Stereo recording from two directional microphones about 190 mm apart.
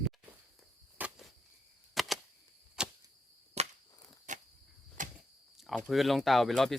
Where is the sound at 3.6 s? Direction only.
35° right (ahead or behind).